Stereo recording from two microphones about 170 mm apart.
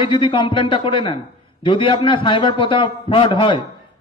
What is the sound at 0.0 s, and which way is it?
A man's voice, 30° left (ahead or behind).